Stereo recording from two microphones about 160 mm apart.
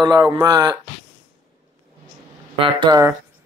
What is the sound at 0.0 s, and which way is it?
Speech, 25° right (ahead or behind).